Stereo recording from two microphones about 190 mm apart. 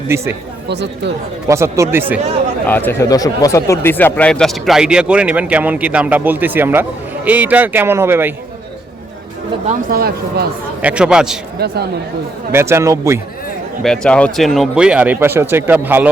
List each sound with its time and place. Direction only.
0.7 s speech: 65° right (ahead or behind)
1.5 s speech: 15° right (ahead or behind)
2.6 s speech: 10° left (ahead or behind); by 8.3 s 15° right (ahead or behind)
9.6 s speech: 50° right (ahead or behind)
10.8 s speech: 5° right (ahead or behind)
11.6 s speech: 55° right (ahead or behind)
12.5 s speech: 15° right (ahead or behind)
13.8 s speech: 5° left (ahead or behind)